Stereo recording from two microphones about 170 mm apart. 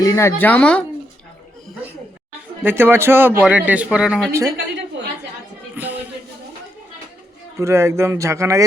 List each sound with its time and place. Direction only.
0.0 s speech: 20° left (ahead or behind)
2.6 s a man's voice: 10° right (ahead or behind)
5.7 s music: 10° right (ahead or behind)
7.6 s a man's voice: 15° right (ahead or behind)